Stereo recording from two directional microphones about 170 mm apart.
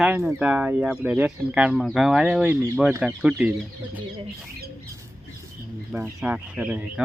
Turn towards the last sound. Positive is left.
turn(degrees=-5)  # may be behind; listen again after turning